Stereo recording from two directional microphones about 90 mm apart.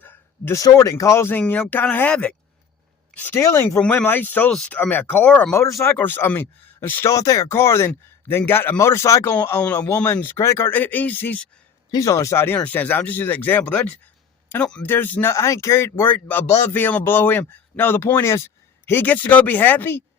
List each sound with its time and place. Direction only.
0.0 s a sound: 25° left (ahead or behind)
0.5 s speech: 35° left (ahead or behind)
1.4 s a man's voice: 15° left (ahead or behind)
3.4 s speech: 30° left (ahead or behind)
3.8 s a man's voice: 15° left (ahead or behind)
5.5 s a man's voice: 30° left (ahead or behind)
7.1 s a man's voice: 35° left (ahead or behind)
10.7 s a man's voice: 20° left (ahead or behind)
11.9 s speech: 35° left (ahead or behind)
12.5 s a man's voice: 15° left (ahead or behind)